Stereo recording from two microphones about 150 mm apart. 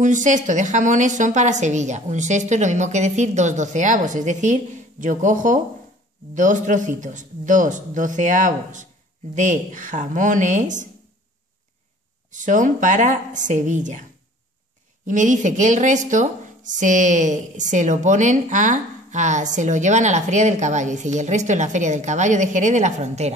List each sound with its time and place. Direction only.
0.0 s a woman's voice: 55° right (ahead or behind)
12.3 s a woman's voice: 55° right (ahead or behind)
15.0 s a woman's voice: 55° right (ahead or behind)